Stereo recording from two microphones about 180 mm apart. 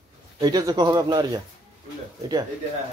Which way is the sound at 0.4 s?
20° right (ahead or behind).